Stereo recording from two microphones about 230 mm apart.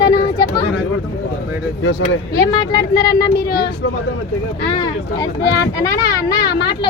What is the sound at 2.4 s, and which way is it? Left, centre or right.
Speech, centre.